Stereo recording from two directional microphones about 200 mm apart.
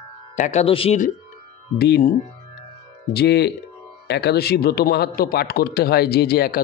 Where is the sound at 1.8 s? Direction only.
50° left (ahead or behind).